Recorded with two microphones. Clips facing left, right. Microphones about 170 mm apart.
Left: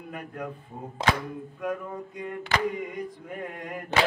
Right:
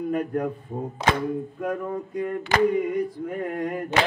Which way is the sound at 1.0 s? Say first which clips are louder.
Right 2 dB; 90° left.